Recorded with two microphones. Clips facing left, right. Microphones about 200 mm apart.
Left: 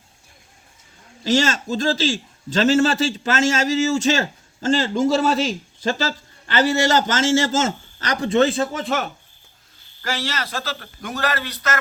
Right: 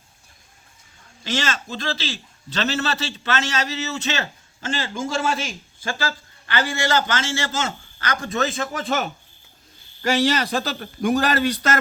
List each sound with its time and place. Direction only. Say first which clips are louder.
1.2 s a man's voice: left 7 dB; 40° left (ahead or behind)
8.1 s a man's voice: left 7 dB; 30° left (ahead or behind)
8.8 s speech: left 1 dB; centre (ahead or behind)
10.0 s a man's voice: right 7 dB; 15° right (ahead or behind)